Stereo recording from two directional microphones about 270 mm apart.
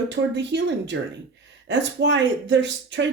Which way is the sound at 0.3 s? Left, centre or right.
Right.